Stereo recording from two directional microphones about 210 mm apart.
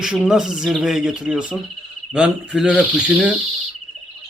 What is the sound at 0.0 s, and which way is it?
Speech, 5° right (ahead or behind).